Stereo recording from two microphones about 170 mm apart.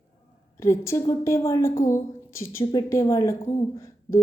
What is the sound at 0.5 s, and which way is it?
A woman's voice, 15° left (ahead or behind).